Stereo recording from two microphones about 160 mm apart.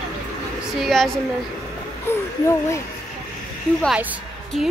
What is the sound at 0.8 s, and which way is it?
Speech, centre (ahead or behind).